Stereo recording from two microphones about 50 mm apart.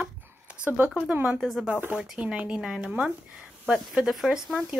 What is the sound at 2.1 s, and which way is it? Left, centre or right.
Speech, right.